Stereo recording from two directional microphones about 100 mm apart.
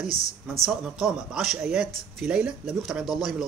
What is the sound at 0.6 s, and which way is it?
Speech, 5° right (ahead or behind).